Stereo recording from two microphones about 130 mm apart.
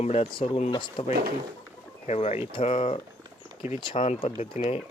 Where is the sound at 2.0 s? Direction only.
55° left (ahead or behind).